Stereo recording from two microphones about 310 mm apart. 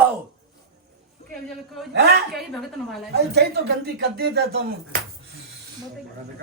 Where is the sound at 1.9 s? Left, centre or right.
Right.